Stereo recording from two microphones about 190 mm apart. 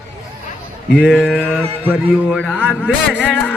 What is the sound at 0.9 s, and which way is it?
Speech, 5° left (ahead or behind).